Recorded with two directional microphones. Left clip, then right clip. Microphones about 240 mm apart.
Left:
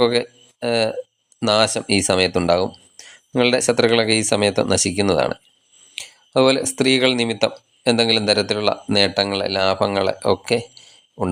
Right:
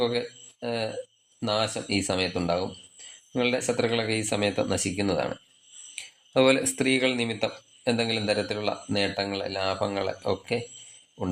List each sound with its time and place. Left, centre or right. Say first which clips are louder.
0.0 s speech: left 9 dB; left